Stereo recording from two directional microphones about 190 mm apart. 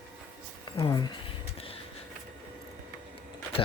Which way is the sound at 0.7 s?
25° left (ahead or behind).